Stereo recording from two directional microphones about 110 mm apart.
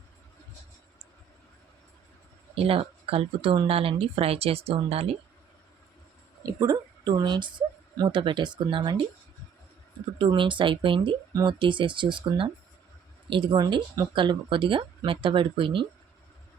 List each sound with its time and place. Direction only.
2.6 s speech: 60° right (ahead or behind)
6.4 s speech: 35° right (ahead or behind)
10.2 s speech: 50° right (ahead or behind)